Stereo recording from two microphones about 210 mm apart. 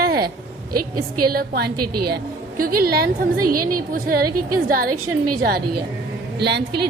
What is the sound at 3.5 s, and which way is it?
Speech, 90° right.